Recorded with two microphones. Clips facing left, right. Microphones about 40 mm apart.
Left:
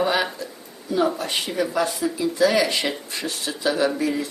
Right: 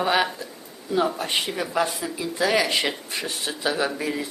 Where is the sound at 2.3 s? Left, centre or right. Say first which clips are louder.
Left 1 dB; right.